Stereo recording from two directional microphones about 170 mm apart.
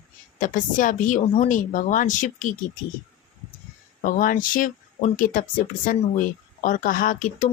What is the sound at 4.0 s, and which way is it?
Speech, 55° left (ahead or behind).